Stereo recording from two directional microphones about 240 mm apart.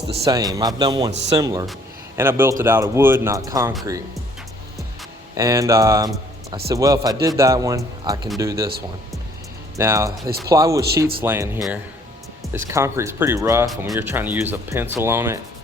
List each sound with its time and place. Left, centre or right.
0.3 s speech: centre
5.3 s speech: centre
9.7 s speech: centre
10.8 s speech: right
11.0 s speech: centre